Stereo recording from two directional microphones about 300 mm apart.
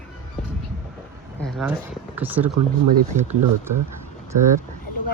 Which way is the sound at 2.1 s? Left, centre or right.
Centre.